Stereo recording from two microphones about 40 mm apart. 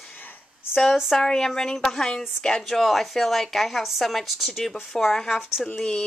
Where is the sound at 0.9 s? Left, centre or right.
Centre.